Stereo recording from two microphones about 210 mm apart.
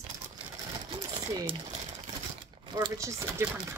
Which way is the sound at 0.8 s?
25° right (ahead or behind).